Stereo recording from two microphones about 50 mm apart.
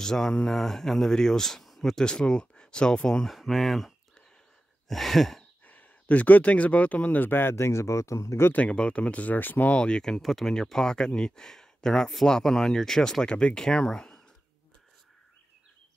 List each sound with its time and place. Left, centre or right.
0.0 s speech: centre
2.0 s speech: centre
3.3 s speech: centre
4.8 s sigh: centre
5.7 s speech: left
7.2 s speech: left
8.5 s speech: left
9.8 s speech: centre
10.2 s speech: centre